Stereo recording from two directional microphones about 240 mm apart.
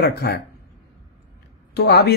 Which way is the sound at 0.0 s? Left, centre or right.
Left.